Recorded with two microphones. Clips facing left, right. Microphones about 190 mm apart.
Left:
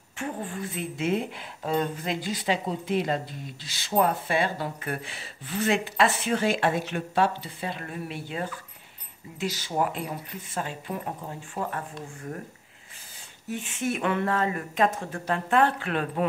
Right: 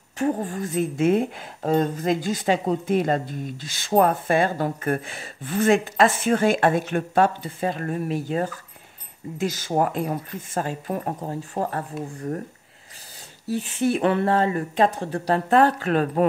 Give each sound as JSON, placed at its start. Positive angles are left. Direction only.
{"t": 0.2, "sound": "speech", "side_deg": -40}
{"t": 13.5, "sound": "speech", "side_deg": -35}